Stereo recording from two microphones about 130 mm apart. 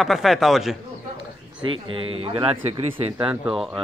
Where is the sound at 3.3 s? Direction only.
Centre (ahead or behind).